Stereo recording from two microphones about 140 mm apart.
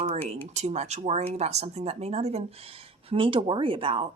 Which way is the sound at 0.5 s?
50° right (ahead or behind).